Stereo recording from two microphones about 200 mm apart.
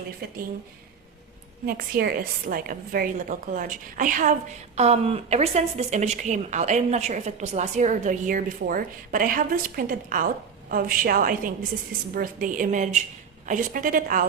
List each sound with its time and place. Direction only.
1.6 s a woman's voice: 50° right (ahead or behind)